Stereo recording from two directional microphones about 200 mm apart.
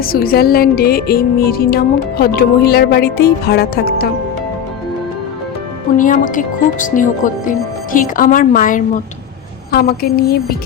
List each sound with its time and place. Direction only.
0.0 s music: 50° left (ahead or behind)
6.0 s speech: 40° left (ahead or behind)
7.9 s music: 45° left (ahead or behind)